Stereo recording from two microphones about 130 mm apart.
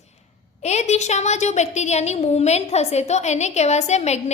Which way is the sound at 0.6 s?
60° left (ahead or behind).